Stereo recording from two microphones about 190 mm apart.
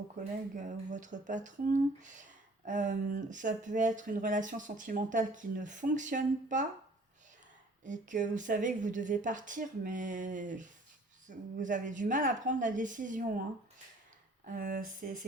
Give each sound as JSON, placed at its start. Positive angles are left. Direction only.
{"t": 0.2, "sound": "speech", "side_deg": -40}
{"t": 7.9, "sound": "speech", "side_deg": -40}
{"t": 14.4, "sound": "speech", "side_deg": -45}